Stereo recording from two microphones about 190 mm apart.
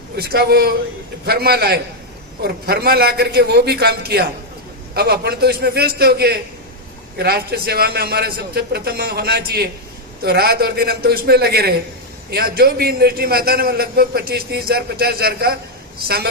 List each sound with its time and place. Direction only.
0.2 s a man's voice: 55° right (ahead or behind)